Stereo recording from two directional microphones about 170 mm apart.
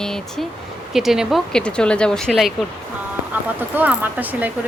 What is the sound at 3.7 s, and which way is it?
Speech, 10° right (ahead or behind).